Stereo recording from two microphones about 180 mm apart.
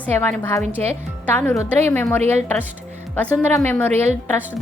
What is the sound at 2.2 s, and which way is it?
Speech, 40° right (ahead or behind).